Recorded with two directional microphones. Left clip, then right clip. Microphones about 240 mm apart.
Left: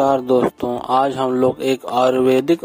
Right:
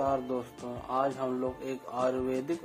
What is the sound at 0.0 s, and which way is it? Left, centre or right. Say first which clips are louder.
Speech: left 16 dB; left.